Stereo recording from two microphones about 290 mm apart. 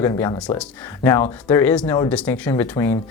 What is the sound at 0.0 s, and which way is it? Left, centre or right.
Speech, centre.